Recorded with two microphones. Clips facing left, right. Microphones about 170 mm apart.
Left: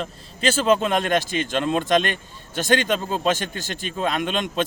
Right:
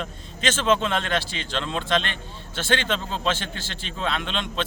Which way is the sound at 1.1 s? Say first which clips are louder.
Left 6 dB; 45° left (ahead or behind).